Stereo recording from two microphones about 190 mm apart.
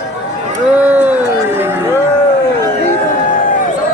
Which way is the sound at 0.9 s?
10° right (ahead or behind).